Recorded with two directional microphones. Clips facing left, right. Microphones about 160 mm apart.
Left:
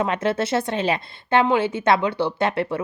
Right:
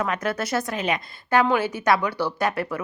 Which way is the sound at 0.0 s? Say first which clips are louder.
Left 4 dB; 25° left (ahead or behind).